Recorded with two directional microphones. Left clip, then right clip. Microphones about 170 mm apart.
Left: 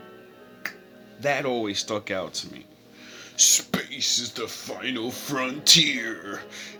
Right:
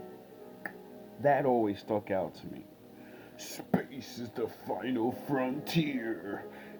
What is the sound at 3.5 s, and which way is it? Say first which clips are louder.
Speech: left 9 dB; 20° left (ahead or behind).